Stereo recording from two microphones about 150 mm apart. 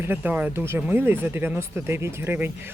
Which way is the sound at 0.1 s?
10° right (ahead or behind).